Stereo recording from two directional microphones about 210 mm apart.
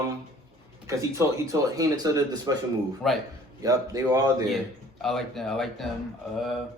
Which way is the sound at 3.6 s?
15° right (ahead or behind).